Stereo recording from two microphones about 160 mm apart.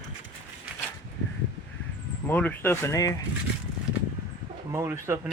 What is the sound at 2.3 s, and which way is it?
Speech, 10° left (ahead or behind).